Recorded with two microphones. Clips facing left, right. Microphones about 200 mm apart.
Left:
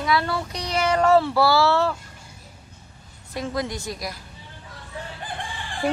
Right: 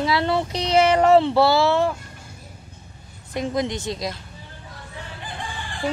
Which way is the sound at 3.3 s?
20° right (ahead or behind).